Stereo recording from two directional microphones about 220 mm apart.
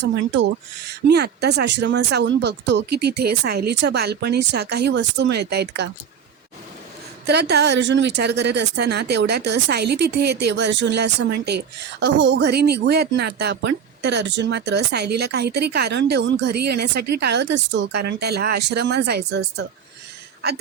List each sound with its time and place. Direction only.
0.9 s speech: 50° right (ahead or behind)
7.3 s speech: 50° right (ahead or behind)